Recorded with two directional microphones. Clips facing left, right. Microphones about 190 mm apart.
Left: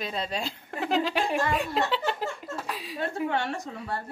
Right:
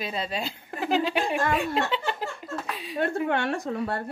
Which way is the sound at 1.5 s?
Centre (ahead or behind).